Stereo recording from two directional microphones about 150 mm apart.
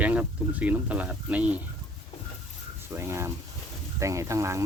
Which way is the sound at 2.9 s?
15° right (ahead or behind).